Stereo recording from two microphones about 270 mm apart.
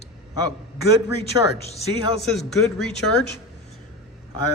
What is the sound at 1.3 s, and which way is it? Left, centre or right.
Speech, centre.